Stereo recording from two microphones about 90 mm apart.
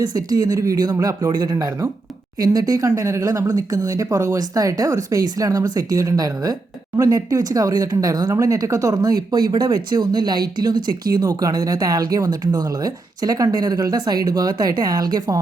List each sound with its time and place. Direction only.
0.0 s speech: 45° right (ahead or behind)